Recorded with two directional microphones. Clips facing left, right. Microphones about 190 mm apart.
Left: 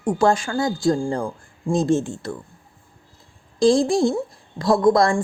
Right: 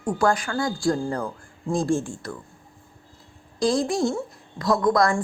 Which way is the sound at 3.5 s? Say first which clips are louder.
Left 6 dB; 25° left (ahead or behind).